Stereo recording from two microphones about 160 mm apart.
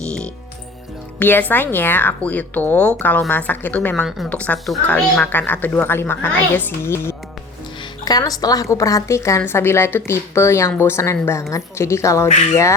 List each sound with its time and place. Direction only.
1.2 s a woman's voice: 10° left (ahead or behind)